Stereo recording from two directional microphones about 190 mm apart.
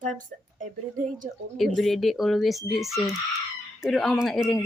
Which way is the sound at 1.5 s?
Centre (ahead or behind).